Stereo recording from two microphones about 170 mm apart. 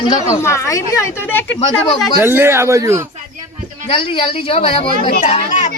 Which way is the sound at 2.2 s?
15° right (ahead or behind).